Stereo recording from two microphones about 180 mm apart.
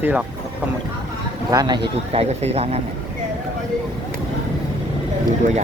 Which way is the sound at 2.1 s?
35° right (ahead or behind).